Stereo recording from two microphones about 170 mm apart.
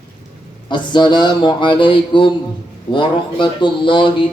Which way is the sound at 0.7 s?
25° left (ahead or behind).